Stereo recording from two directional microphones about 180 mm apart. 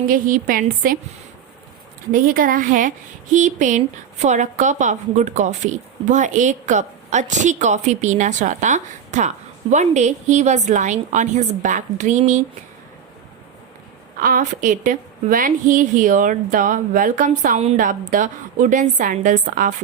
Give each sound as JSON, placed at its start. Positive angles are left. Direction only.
{"t": 0.1, "sound": "a woman's voice", "side_deg": -50}
{"t": 2.1, "sound": "a woman's voice", "side_deg": -50}
{"t": 14.2, "sound": "a woman's voice", "side_deg": -50}